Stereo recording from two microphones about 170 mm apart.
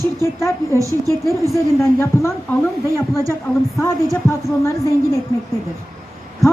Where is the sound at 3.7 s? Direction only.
20° left (ahead or behind).